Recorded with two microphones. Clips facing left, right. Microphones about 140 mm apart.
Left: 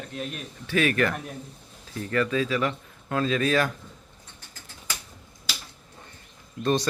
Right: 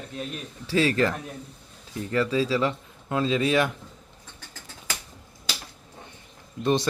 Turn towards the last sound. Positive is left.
turn(degrees=-20)  # may be behind; listen again after turning